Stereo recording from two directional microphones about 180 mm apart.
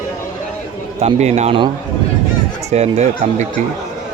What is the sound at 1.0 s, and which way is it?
Speech, 35° right (ahead or behind).